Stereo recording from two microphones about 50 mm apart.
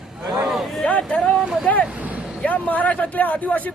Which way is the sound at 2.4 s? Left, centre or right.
Left.